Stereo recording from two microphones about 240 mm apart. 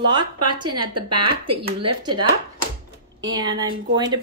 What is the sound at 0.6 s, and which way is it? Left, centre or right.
Speech, right.